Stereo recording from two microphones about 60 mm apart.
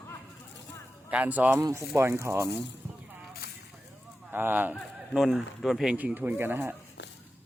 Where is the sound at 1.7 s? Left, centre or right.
Right.